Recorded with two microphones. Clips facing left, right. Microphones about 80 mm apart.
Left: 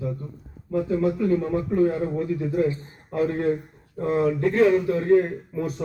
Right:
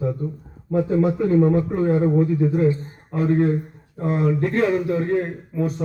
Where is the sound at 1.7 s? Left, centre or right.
Right.